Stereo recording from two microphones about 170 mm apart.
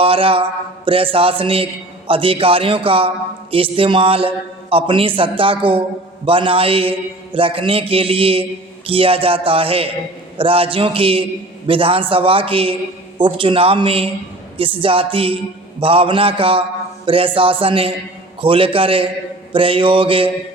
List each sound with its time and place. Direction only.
0.0 s mantra: 30° right (ahead or behind)
0.9 s a man's voice: 30° right (ahead or behind)